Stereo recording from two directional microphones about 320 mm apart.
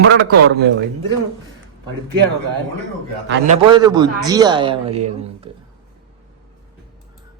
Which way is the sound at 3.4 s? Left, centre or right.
Centre.